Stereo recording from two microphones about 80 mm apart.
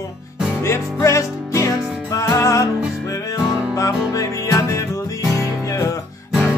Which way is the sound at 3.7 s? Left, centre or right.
Left.